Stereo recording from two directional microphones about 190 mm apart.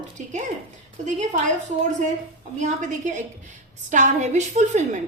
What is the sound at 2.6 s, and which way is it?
A woman's voice, 40° right (ahead or behind).